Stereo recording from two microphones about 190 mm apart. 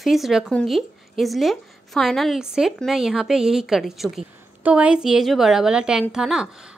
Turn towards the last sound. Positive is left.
turn(degrees=-5)  # may be behind; listen again after turning